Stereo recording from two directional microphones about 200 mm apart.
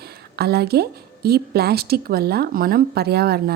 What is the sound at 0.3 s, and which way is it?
Speech, 55° right (ahead or behind).